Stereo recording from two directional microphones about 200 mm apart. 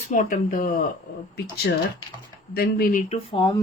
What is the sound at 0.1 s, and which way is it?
Speech, 40° left (ahead or behind).